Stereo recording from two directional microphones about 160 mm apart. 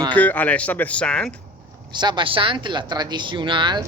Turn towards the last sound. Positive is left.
turn(degrees=-30)  # may be behind; listen again after turning